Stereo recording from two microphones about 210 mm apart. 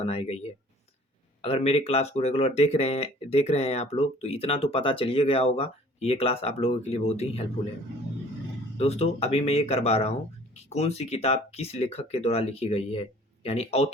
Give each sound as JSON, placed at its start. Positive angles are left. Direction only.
{"t": 0.0, "sound": "speech", "side_deg": 30}
{"t": 8.8, "sound": "speech", "side_deg": 30}